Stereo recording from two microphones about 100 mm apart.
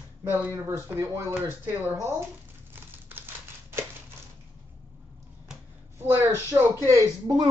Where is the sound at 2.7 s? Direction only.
20° right (ahead or behind).